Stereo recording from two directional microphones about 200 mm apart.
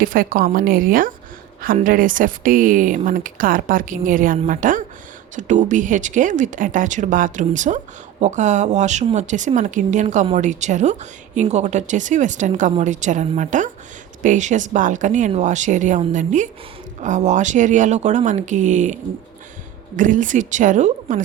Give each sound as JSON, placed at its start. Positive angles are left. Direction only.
{"t": 0.0, "sound": "speech", "side_deg": -45}
{"t": 20.0, "sound": "speech", "side_deg": -40}